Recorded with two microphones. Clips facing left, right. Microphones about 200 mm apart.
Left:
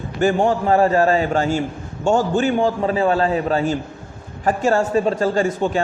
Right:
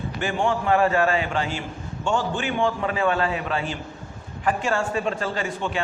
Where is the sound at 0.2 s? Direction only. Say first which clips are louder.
Left 8 dB; 40° left (ahead or behind).